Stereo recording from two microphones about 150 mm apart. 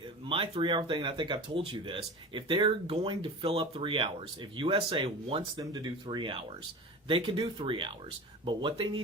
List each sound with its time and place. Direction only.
0.0 s speech: 35° right (ahead or behind)
5.5 s speech: 25° right (ahead or behind)